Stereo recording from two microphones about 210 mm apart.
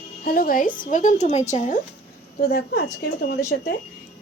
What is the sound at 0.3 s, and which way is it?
A woman's voice, 40° left (ahead or behind).